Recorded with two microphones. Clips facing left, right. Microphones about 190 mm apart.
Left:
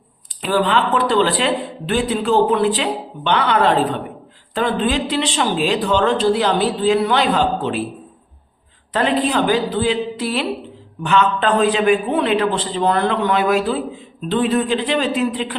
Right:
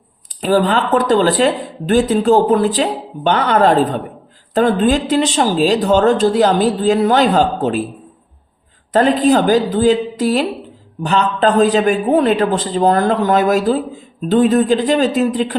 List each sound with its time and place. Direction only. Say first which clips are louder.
0.4 s speech: right 3 dB; 40° right (ahead or behind)
8.9 s a man's voice: right 6 dB; 45° right (ahead or behind)